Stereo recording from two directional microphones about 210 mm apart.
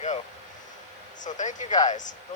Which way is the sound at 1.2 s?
35° left (ahead or behind).